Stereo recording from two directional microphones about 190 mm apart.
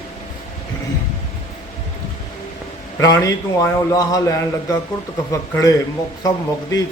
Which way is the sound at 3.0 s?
15° left (ahead or behind).